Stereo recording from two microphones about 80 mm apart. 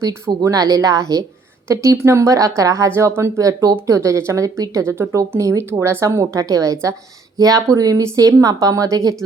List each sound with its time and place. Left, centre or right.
0.4 s a woman's voice: right